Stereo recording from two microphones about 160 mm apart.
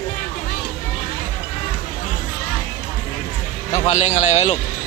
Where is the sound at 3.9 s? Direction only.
45° left (ahead or behind).